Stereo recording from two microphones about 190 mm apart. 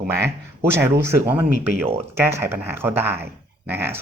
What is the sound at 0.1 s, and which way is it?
Speech, 15° right (ahead or behind).